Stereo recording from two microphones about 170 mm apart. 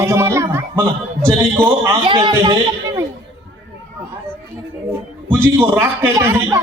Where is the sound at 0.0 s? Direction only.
15° right (ahead or behind).